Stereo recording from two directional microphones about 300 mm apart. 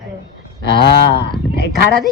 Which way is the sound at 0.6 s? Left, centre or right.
Left.